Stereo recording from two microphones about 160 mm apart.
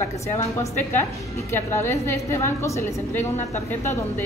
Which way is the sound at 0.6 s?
15° left (ahead or behind).